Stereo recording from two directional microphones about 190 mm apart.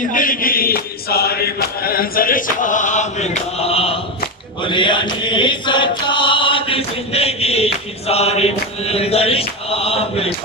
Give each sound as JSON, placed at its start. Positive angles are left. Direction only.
{"t": 0.1, "sound": "chant", "side_deg": 45}